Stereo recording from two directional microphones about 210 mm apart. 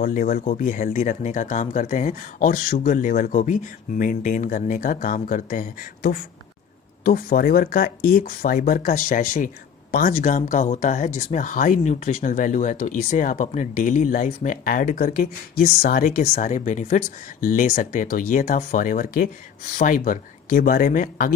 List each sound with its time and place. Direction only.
0.0 s speech: 40° left (ahead or behind)